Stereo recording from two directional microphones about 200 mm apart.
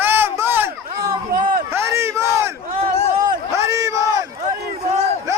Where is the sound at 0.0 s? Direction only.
10° right (ahead or behind).